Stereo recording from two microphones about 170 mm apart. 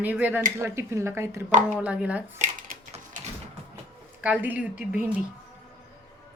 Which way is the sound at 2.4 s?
50° right (ahead or behind).